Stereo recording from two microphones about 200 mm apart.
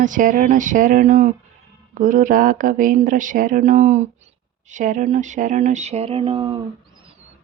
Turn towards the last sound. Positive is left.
turn(degrees=-25)  # may be behind; listen again after turning